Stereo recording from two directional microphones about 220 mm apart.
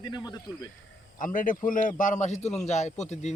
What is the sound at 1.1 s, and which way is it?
A man's voice, 35° left (ahead or behind).